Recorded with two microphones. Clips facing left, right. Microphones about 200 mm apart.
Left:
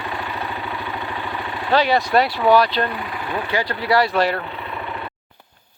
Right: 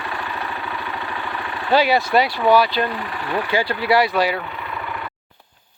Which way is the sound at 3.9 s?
Centre (ahead or behind).